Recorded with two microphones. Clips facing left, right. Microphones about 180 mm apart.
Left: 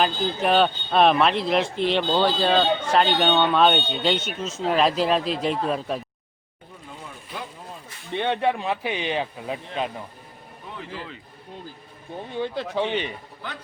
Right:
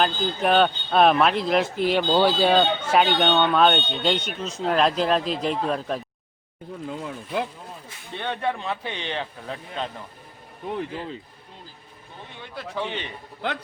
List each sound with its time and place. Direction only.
0.0 s speech: centre (ahead or behind)
8.1 s speech: 20° left (ahead or behind)
10.9 s speech: 30° right (ahead or behind)
12.4 s speech: 25° left (ahead or behind)
12.9 s speech: 15° left (ahead or behind)